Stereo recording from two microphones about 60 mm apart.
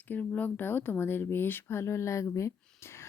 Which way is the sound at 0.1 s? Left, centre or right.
Left.